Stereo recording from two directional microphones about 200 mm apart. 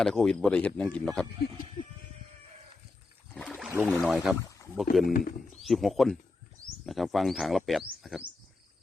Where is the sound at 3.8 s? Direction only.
Centre (ahead or behind).